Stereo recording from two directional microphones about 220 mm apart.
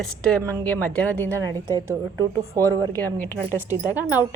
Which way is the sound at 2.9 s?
10° left (ahead or behind).